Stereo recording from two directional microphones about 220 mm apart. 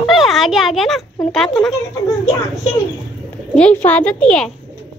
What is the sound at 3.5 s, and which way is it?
Speech, 5° left (ahead or behind).